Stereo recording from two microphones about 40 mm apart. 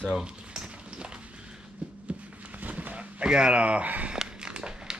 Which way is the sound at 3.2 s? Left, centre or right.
Right.